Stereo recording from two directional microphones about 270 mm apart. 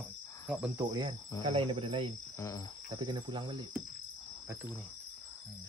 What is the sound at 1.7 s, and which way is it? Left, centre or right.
Cricket, centre.